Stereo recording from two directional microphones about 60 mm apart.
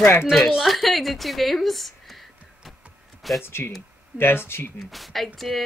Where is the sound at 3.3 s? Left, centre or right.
Left.